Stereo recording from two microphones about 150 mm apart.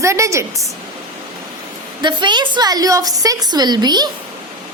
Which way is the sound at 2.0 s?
30° right (ahead or behind).